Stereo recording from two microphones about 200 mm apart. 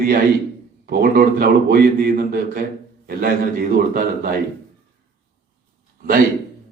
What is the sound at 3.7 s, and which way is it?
Speech, 50° right (ahead or behind).